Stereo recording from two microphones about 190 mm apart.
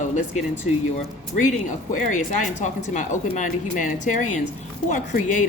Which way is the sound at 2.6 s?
40° left (ahead or behind).